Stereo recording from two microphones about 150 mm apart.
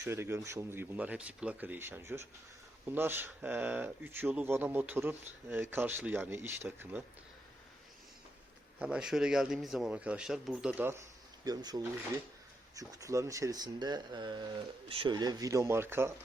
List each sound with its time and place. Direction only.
0.0 s speech: 15° right (ahead or behind)
8.8 s a man's voice: 5° right (ahead or behind)
11.4 s speech: 25° right (ahead or behind)
12.9 s speech: 20° right (ahead or behind)